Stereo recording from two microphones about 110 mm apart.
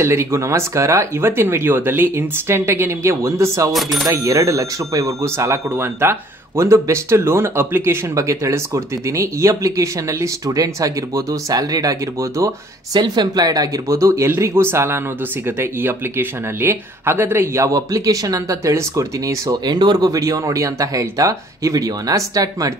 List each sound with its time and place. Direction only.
0.0 s speech: 25° right (ahead or behind)
3.7 s speech: centre (ahead or behind)
4.1 s speech: 30° right (ahead or behind)